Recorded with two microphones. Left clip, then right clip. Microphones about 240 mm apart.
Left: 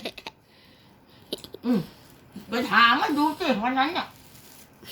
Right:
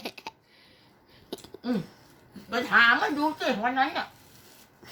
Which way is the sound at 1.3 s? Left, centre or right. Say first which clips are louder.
Left 5 dB; centre.